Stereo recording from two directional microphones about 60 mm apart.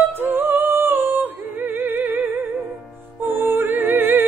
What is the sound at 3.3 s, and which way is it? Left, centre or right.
Music, right.